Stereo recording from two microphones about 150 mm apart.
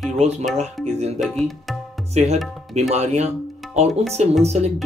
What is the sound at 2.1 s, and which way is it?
Speech, 50° right (ahead or behind).